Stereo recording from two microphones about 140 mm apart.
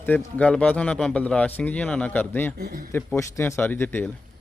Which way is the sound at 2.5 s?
90° right.